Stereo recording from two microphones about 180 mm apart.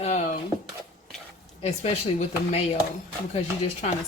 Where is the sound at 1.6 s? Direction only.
35° left (ahead or behind).